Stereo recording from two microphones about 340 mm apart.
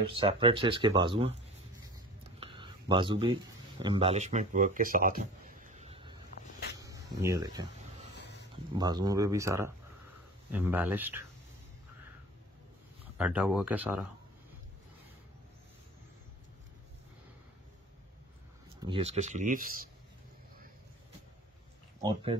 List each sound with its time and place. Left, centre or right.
0.0 s speech: centre
2.4 s a sound: centre
3.8 s speech: centre
8.7 s speech: centre
13.2 s speech: centre
18.8 s speech: centre
22.0 s speech: centre